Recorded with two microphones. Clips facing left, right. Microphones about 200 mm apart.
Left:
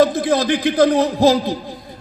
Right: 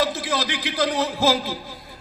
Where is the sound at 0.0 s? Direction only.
55° left (ahead or behind).